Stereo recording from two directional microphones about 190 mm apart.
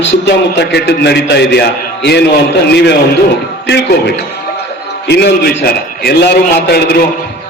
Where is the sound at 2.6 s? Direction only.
60° left (ahead or behind).